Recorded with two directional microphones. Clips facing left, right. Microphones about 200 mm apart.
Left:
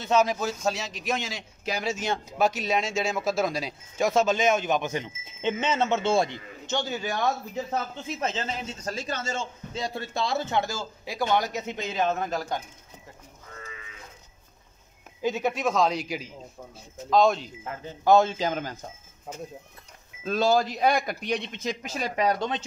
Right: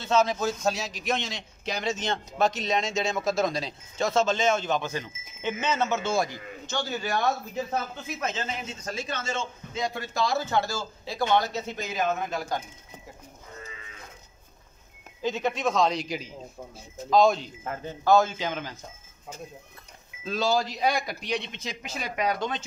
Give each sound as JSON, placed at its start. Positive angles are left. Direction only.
{"t": 0.0, "sound": "a man's voice", "side_deg": 15}
{"t": 8.2, "sound": "a man's voice", "side_deg": 30}
{"t": 15.2, "sound": "a man's voice", "side_deg": 10}
{"t": 18.0, "sound": "a man's voice", "side_deg": 25}
{"t": 18.4, "sound": "a man's voice", "side_deg": 45}
{"t": 20.2, "sound": "a man's voice", "side_deg": 50}